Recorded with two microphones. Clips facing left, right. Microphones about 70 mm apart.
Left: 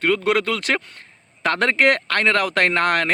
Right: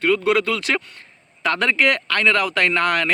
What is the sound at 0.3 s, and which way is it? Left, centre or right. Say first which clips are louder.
Speech: right 1 dB; left.